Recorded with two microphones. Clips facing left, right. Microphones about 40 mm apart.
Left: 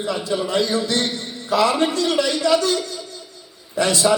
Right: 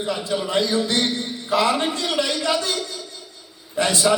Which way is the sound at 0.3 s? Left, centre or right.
Right.